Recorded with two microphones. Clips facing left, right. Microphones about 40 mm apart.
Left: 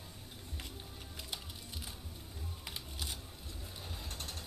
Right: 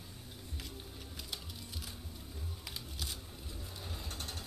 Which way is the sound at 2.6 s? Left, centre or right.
Centre.